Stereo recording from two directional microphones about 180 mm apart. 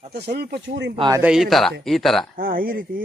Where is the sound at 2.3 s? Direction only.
50° right (ahead or behind).